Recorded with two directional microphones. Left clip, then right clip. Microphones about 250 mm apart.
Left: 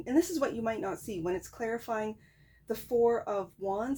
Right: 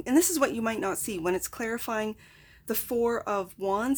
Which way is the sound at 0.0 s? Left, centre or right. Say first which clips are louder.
Right 5 dB; right.